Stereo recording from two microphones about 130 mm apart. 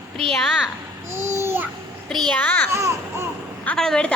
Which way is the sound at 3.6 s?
5° left (ahead or behind).